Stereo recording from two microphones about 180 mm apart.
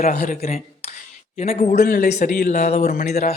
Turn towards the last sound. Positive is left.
turn(degrees=40)  # may be behind; listen again after turning